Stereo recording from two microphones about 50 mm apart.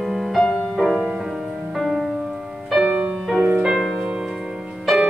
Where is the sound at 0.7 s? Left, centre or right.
Centre.